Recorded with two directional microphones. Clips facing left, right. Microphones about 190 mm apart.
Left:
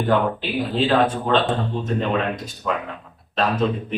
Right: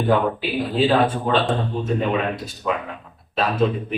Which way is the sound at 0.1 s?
10° right (ahead or behind).